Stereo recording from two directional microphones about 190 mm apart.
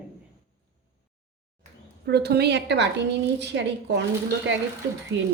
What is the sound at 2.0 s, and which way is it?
A woman's voice, 60° right (ahead or behind).